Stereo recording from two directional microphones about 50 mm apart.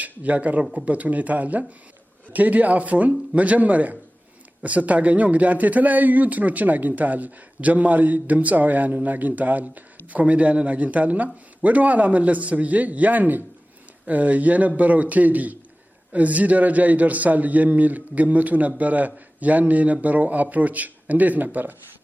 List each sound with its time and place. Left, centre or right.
0.0 s speech: right